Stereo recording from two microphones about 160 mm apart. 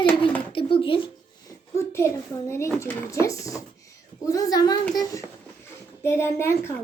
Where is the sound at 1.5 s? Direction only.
15° left (ahead or behind).